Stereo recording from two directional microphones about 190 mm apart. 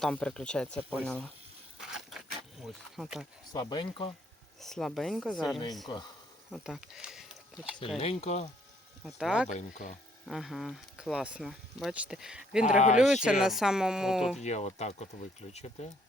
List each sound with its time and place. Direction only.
0.0 s speech: 5° left (ahead or behind)
1.8 s a sound: centre (ahead or behind)
2.9 s speech: centre (ahead or behind)
3.5 s speech: 20° left (ahead or behind)
4.6 s speech: centre (ahead or behind)
7.9 s speech: 30° left (ahead or behind)
9.0 s speech: centre (ahead or behind)
9.5 s speech: 40° left (ahead or behind)
10.2 s speech: centre (ahead or behind)
12.6 s speech: 40° left (ahead or behind)
13.0 s speech: centre (ahead or behind)
14.4 s speech: 35° left (ahead or behind)